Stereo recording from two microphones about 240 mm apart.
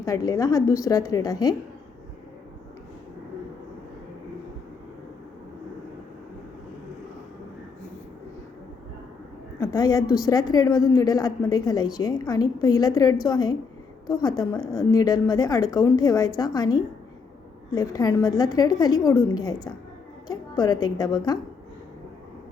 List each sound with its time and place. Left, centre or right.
0.0 s a woman's voice: centre
9.6 s a woman's voice: centre